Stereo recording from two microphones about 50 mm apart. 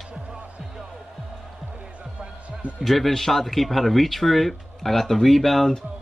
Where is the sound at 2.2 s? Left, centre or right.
Right.